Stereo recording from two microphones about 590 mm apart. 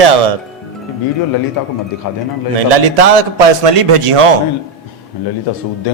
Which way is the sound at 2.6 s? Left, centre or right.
Right.